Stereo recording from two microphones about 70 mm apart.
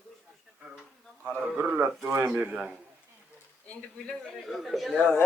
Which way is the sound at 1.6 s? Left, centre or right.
Right.